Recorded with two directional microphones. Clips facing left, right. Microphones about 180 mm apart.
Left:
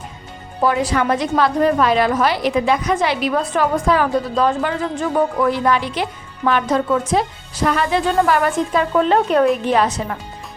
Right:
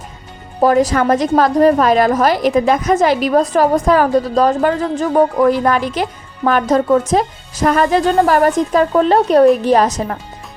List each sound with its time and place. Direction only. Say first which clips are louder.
0.6 s a woman's voice: right 5 dB; 40° right (ahead or behind)